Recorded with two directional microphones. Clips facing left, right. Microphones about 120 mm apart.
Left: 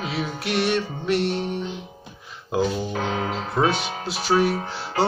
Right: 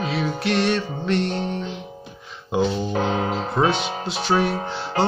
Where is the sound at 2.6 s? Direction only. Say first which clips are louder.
Right 3 dB; 25° right (ahead or behind).